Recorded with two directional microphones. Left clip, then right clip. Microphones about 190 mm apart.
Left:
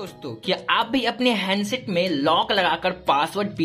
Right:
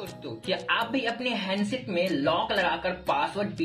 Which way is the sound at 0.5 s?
35° left (ahead or behind).